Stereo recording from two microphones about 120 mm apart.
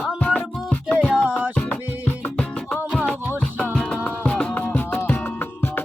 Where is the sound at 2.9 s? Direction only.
5° left (ahead or behind).